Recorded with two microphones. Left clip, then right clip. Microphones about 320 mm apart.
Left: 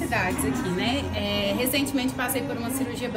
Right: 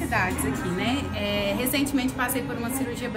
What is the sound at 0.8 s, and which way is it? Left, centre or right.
Music, centre.